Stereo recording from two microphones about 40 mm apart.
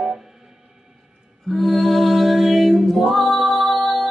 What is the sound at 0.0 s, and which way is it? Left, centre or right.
Music, centre.